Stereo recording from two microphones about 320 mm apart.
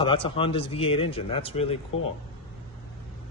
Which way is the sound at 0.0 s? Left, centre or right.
Centre.